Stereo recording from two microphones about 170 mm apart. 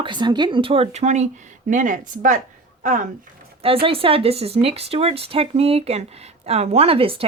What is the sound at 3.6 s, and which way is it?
A woman's voice, 35° right (ahead or behind).